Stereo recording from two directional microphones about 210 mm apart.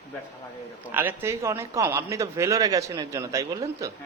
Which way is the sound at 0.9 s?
10° right (ahead or behind).